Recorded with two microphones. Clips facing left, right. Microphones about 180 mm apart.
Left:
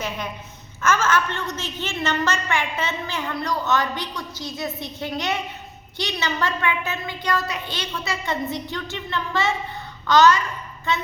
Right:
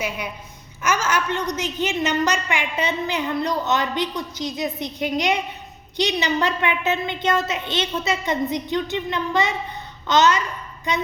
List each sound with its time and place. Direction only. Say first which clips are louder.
0.8 s a woman's voice: left 1 dB; 10° right (ahead or behind)